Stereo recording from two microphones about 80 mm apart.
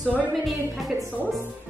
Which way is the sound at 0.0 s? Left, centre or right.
Centre.